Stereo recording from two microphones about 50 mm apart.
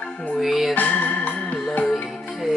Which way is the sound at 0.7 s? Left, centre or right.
Left.